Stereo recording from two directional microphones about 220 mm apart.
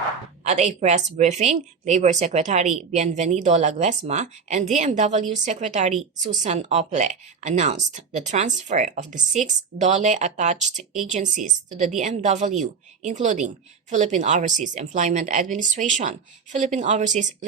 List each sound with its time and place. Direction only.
0.4 s a woman's voice: 30° right (ahead or behind)